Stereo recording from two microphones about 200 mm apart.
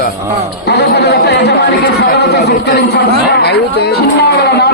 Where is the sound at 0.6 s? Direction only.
55° left (ahead or behind).